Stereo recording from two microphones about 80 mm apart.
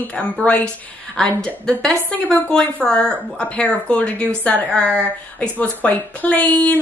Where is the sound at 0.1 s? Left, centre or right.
Centre.